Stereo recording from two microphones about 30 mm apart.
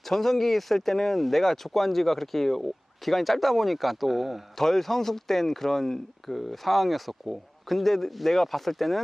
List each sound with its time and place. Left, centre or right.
0.0 s speech: centre
4.5 s speech: centre